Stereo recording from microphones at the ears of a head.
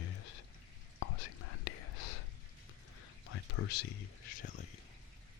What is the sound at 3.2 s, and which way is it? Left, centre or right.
Speech, left.